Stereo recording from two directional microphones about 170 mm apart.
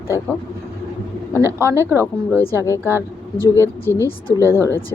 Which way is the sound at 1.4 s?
15° right (ahead or behind).